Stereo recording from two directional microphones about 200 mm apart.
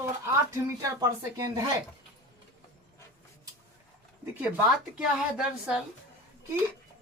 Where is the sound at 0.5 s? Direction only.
15° right (ahead or behind).